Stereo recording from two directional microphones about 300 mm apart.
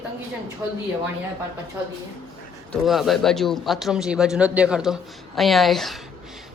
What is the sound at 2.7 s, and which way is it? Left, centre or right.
A man's voice, centre.